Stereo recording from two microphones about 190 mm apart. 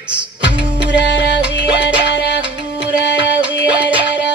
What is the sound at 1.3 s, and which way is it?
Music, 5° right (ahead or behind).